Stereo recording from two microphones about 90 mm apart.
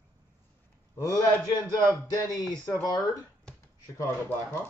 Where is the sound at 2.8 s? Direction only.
40° left (ahead or behind).